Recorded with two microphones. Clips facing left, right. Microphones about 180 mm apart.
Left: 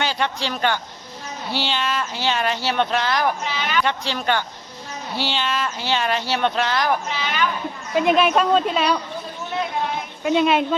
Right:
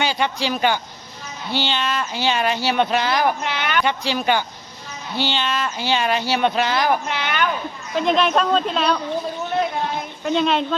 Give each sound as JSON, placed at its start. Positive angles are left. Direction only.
{"t": 0.0, "sound": "a man's voice", "side_deg": -5}
{"t": 1.5, "sound": "speech", "side_deg": 5}
{"t": 3.4, "sound": "a sound", "side_deg": -65}
{"t": 3.8, "sound": "speech", "side_deg": -5}
{"t": 5.1, "sound": "speech", "side_deg": 5}
{"t": 7.1, "sound": "a sound", "side_deg": -60}
{"t": 7.9, "sound": "speech", "side_deg": 10}
{"t": 10.2, "sound": "speech", "side_deg": 5}